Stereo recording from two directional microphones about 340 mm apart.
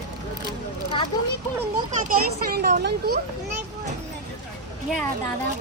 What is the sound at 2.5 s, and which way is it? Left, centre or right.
Speech, right.